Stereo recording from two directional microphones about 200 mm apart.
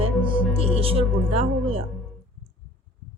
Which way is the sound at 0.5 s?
30° right (ahead or behind).